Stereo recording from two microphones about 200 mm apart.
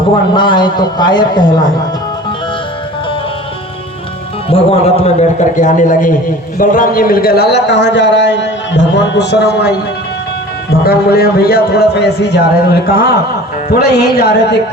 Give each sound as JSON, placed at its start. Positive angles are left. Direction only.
{"t": 0.3, "sound": "a man's voice", "side_deg": 25}
{"t": 4.4, "sound": "a man's voice", "side_deg": 30}